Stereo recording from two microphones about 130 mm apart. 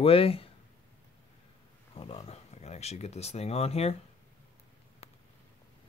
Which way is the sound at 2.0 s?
45° left (ahead or behind).